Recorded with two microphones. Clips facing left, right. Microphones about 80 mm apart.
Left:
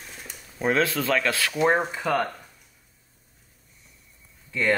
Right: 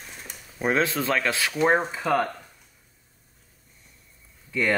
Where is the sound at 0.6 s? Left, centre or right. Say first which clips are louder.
Even; right.